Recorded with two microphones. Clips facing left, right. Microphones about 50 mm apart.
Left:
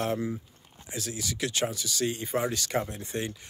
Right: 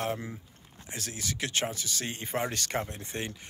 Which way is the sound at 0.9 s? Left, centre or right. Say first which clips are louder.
Left 2 dB; right.